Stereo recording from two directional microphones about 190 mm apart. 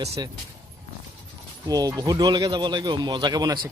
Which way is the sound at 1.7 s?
20° right (ahead or behind).